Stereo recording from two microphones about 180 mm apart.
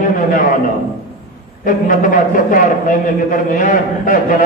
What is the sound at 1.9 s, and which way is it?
A man's voice, 50° left (ahead or behind).